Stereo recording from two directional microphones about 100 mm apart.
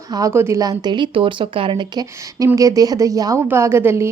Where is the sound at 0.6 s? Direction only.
40° right (ahead or behind); by 1.9 s 60° right (ahead or behind).